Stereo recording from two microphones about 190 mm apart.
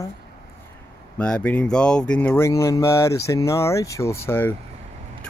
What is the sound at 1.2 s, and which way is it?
Speech, 5° left (ahead or behind).